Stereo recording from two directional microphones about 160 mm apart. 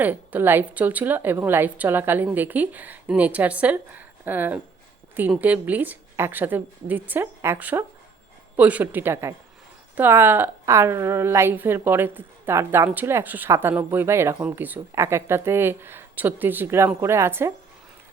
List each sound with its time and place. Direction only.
0.0 s a woman's voice: 10° right (ahead or behind)